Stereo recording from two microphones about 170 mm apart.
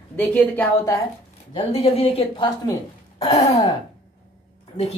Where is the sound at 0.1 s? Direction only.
10° left (ahead or behind).